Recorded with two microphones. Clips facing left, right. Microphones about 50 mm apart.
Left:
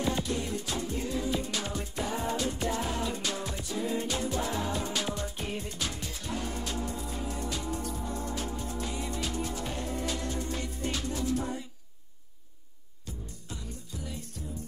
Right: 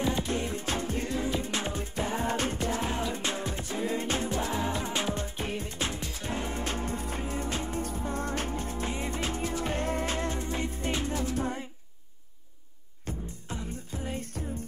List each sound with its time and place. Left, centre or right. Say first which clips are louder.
0.2 s music: right 1 dB; right
13.0 s music: right 6 dB; right